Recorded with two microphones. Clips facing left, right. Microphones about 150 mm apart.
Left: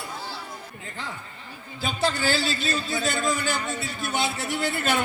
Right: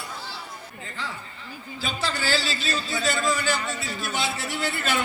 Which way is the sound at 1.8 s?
55° left (ahead or behind).